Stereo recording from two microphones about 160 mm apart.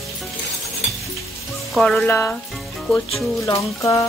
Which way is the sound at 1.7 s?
5° left (ahead or behind).